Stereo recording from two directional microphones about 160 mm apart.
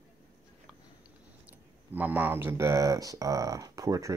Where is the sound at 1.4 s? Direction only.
10° right (ahead or behind).